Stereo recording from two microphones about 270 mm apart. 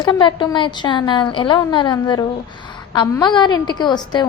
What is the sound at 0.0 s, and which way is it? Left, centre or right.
A woman's voice, centre.